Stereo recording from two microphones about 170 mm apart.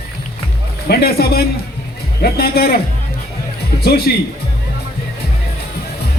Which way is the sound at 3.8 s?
65° left (ahead or behind).